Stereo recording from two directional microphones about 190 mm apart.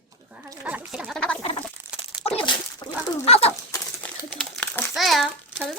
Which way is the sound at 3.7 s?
5° left (ahead or behind).